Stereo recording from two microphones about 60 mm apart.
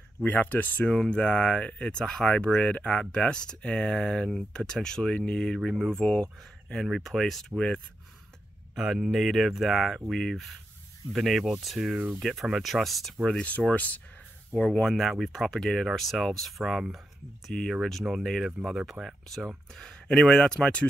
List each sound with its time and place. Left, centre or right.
0.2 s speech: left
0.8 s speech: centre
8.7 s speech: centre
13.3 s speech: left
14.6 s speech: centre
18.6 s speech: centre
19.7 s speech: centre